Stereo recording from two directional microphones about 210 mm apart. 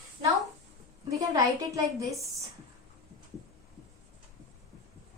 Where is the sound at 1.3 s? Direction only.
15° right (ahead or behind).